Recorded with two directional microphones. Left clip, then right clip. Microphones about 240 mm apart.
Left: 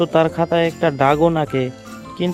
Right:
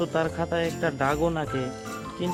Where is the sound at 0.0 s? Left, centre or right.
Left.